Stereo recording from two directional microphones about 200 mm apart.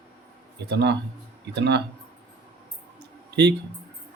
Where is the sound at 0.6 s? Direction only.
55° right (ahead or behind).